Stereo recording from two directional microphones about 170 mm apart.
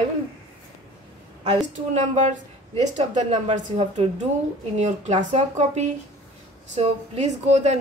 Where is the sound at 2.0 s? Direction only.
45° right (ahead or behind).